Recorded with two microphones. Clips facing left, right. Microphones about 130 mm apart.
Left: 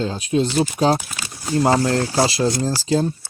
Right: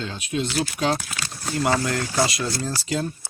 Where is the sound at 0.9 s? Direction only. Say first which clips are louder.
Left 5 dB; 5° left (ahead or behind).